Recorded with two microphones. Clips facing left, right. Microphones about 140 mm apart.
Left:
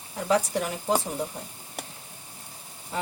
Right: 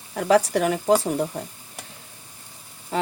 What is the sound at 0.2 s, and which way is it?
Speech, 85° right.